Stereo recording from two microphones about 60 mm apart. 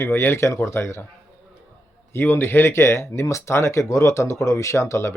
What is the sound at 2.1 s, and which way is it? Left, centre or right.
Speech, left.